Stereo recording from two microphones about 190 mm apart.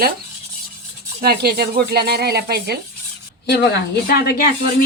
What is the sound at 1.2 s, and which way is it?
Speech, 55° right (ahead or behind).